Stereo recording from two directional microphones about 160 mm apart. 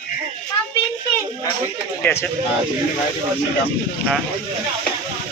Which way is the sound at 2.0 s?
15° left (ahead or behind).